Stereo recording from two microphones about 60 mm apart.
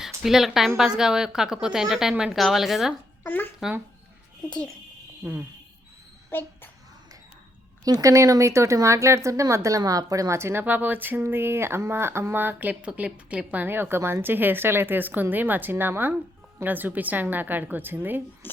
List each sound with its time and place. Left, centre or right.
0.0 s a woman's voice: centre
3.2 s speech: left
5.2 s speech: right
6.3 s speech: left
8.0 s speech: right
10.3 s speech: right
10.6 s speech: right